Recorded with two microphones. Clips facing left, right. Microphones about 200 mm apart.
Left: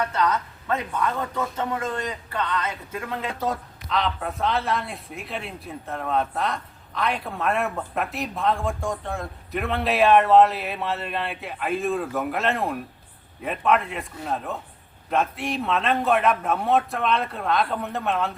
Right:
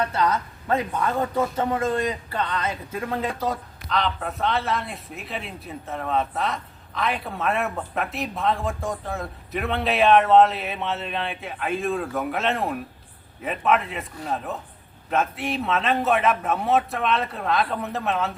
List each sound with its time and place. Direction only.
0.0 s speech: 30° right (ahead or behind)
3.4 s speech: centre (ahead or behind)